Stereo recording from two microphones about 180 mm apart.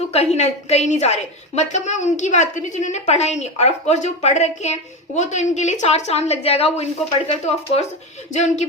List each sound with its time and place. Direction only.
0.1 s a woman's voice: 35° left (ahead or behind)